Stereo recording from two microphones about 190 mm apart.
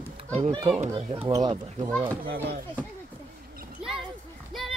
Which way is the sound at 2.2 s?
50° right (ahead or behind).